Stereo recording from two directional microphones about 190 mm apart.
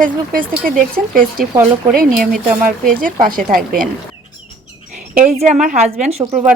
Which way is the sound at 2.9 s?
50° right (ahead or behind).